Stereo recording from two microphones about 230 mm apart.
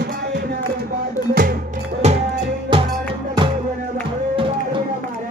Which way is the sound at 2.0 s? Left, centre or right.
Right.